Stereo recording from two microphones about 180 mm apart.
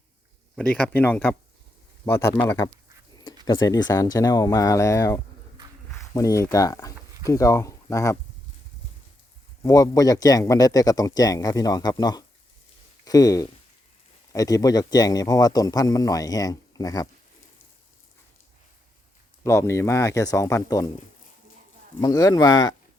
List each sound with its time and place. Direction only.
0.5 s speech: 5° left (ahead or behind)
9.6 s speech: 20° left (ahead or behind)
19.5 s speech: 15° left (ahead or behind)
22.0 s speech: 20° left (ahead or behind)